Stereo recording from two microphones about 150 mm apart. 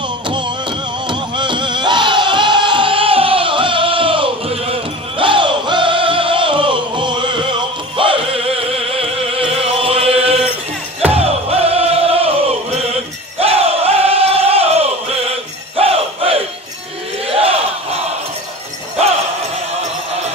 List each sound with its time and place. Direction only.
0.3 s music: 30° right (ahead or behind)
11.1 s choir: 40° right (ahead or behind)
13.4 s crowd: 40° right (ahead or behind)
17.3 s battle cry: 40° right (ahead or behind)